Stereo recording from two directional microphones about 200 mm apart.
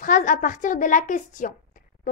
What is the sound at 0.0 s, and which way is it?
A woman's voice, 40° left (ahead or behind).